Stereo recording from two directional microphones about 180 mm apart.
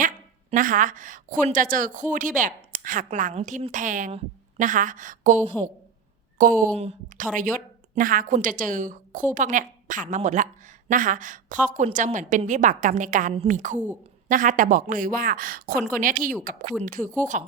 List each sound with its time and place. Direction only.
0.5 s a woman's voice: 50° right (ahead or behind)
6.4 s a woman's voice: 45° right (ahead or behind)
6.7 s speech: 35° right (ahead or behind)
7.3 s a woman's voice: 45° right (ahead or behind)